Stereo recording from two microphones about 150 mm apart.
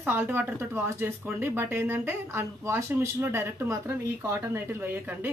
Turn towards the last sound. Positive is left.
turn(degrees=-15)  # may be behind; listen again after turning